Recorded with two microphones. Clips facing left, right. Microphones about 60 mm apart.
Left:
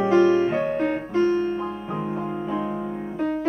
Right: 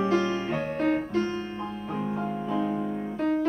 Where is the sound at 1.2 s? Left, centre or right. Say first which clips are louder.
Left 10 dB; left.